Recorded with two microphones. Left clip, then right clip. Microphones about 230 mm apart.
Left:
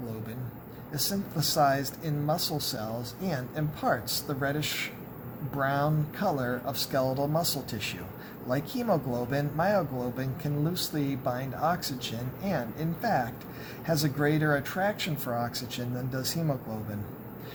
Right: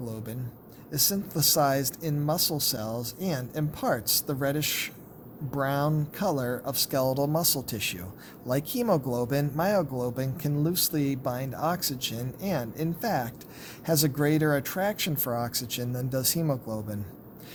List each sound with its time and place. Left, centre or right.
0.9 s speech: right